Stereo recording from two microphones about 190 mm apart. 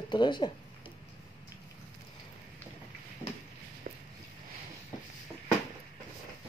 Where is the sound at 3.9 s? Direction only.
50° right (ahead or behind).